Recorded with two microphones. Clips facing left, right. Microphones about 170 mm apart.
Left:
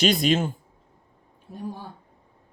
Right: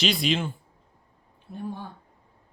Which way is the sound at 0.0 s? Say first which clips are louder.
Left 4 dB; 45° left (ahead or behind).